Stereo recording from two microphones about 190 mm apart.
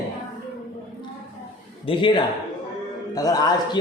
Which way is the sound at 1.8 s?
25° left (ahead or behind).